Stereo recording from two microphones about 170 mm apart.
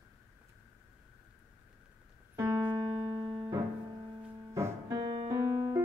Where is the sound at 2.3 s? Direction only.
15° right (ahead or behind).